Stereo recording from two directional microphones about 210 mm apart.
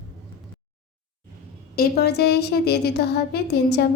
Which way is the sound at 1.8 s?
50° left (ahead or behind).